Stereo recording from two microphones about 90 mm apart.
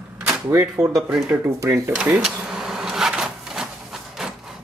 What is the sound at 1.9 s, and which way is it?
Speech, 15° right (ahead or behind).